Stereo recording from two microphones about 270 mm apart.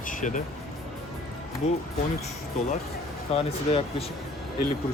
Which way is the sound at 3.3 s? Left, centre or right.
Left.